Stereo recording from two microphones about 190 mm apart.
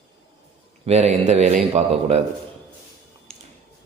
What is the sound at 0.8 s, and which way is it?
A man's voice, 35° right (ahead or behind).